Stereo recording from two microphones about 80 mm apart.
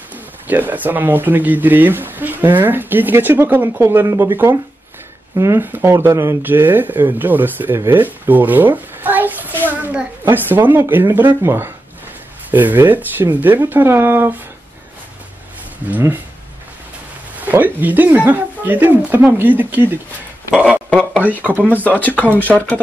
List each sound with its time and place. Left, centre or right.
0.5 s speech: right
17.4 s speech: right
21.2 s speech: right
21.8 s speech: centre